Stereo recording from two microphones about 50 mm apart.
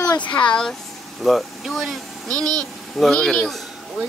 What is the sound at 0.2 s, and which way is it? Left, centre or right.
Speech, left.